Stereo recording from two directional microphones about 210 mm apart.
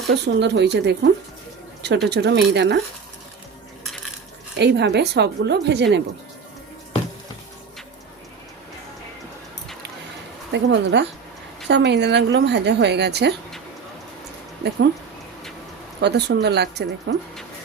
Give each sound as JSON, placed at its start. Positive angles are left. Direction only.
{"t": 0.1, "sound": "a woman's voice", "side_deg": -55}
{"t": 4.5, "sound": "speech", "side_deg": -55}
{"t": 10.5, "sound": "a woman's voice", "side_deg": -55}
{"t": 16.0, "sound": "speech", "side_deg": -55}